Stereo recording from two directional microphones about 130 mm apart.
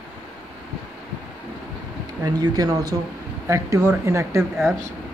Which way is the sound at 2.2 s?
30° right (ahead or behind).